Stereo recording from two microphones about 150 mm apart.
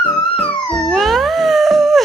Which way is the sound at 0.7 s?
Centre (ahead or behind).